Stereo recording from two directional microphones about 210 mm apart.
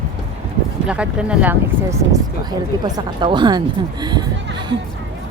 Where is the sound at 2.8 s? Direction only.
20° right (ahead or behind).